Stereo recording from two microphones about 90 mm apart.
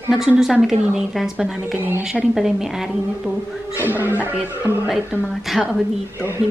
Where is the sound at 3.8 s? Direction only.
20° right (ahead or behind).